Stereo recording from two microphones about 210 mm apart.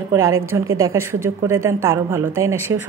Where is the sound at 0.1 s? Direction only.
15° right (ahead or behind).